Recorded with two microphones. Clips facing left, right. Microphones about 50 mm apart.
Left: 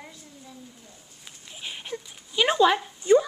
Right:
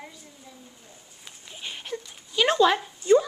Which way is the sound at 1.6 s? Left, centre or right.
Centre.